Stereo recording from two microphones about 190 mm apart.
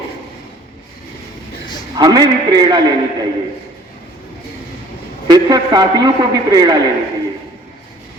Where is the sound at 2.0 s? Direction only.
20° right (ahead or behind).